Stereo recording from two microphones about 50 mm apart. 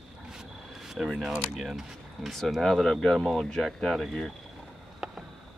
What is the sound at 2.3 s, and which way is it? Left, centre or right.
Speech, centre.